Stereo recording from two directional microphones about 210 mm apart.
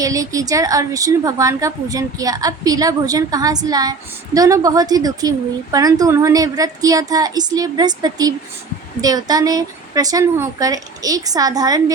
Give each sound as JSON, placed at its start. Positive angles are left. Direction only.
{"t": 0.0, "sound": "a woman's voice", "side_deg": -15}